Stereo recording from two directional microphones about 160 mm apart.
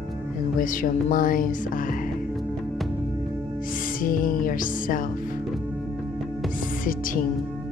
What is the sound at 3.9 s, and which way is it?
Speech, 60° left (ahead or behind).